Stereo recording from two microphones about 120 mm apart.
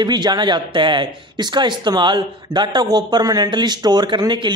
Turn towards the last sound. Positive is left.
turn(degrees=-40)  # may be behind; listen again after turning